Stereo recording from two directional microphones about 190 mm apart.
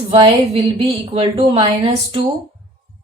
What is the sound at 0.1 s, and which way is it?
Speech, 30° right (ahead or behind).